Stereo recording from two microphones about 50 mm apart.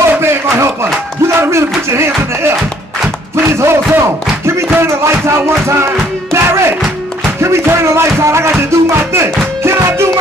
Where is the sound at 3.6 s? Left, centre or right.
Right.